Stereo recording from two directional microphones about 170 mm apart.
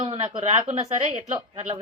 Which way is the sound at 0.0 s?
30° right (ahead or behind).